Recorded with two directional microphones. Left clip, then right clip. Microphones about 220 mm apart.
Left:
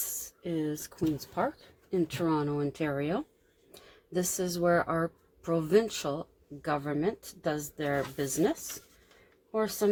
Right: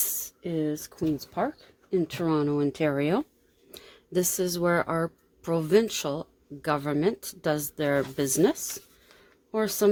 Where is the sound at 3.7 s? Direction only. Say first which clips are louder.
Right 5 dB; 35° right (ahead or behind).